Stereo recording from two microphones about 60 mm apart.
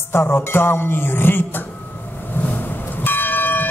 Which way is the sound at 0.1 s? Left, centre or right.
Left.